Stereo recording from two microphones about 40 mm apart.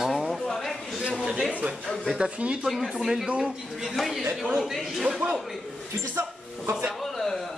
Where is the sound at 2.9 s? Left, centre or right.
Centre.